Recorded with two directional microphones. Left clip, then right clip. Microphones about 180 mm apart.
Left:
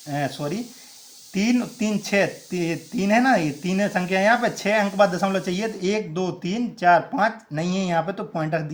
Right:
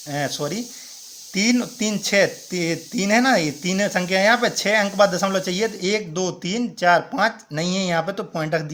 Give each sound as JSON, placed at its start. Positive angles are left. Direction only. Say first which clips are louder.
{"t": 0.1, "sound": "speech", "louder": "right 2 dB", "side_deg": -25}